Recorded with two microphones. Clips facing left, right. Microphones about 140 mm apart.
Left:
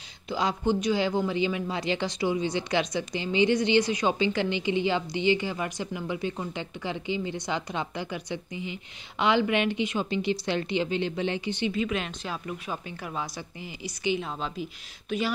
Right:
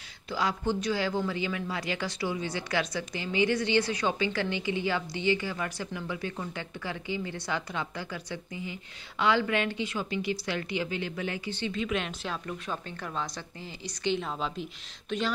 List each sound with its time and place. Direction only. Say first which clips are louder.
0.3 s speech: left 3 dB; 20° left (ahead or behind)
11.7 s a woman's voice: left 2 dB; centre (ahead or behind)